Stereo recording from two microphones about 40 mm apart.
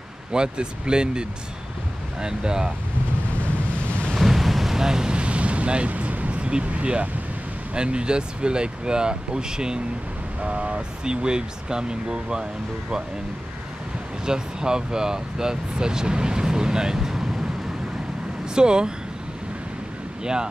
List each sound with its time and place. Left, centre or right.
0.3 s speech: right
4.1 s boat: centre
5.1 s ocean: right
7.7 s speech: right
10.4 s speech: right
14.2 s speech: centre
18.4 s speech: right